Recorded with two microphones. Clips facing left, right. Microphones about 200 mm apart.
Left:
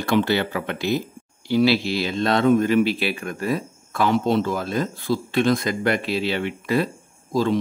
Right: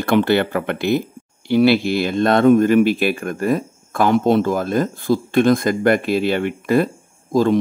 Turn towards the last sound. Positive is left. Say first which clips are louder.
# right 5 dB
turn(degrees=-50)  # may be behind; listen again after turning